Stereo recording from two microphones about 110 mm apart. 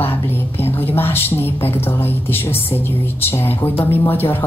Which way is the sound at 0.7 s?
20° left (ahead or behind).